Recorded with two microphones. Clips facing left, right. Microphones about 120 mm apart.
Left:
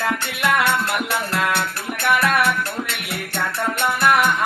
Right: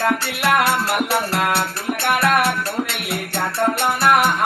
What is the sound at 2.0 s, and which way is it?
Music, 60° right (ahead or behind).